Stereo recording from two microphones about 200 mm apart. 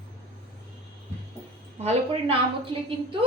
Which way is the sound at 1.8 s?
30° right (ahead or behind).